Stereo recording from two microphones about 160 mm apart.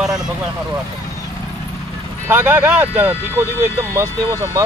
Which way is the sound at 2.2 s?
15° right (ahead or behind).